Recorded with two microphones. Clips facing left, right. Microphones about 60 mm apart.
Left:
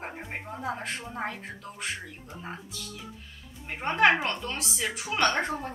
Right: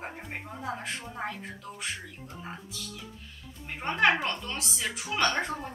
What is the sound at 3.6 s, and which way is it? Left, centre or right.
Speech, centre.